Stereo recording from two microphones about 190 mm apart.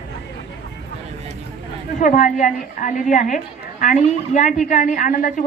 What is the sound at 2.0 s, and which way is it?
A woman's voice, 40° left (ahead or behind).